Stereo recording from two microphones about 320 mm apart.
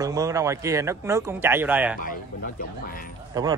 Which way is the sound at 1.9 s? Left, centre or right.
Left.